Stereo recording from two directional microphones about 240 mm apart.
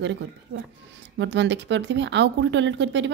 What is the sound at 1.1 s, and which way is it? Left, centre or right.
Speech, right.